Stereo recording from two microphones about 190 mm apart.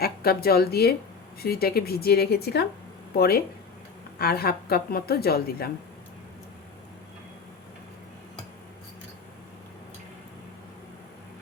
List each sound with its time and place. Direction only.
0.0 s a woman's voice: 55° left (ahead or behind)